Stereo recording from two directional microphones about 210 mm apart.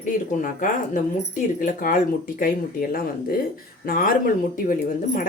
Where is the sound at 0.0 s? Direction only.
40° left (ahead or behind).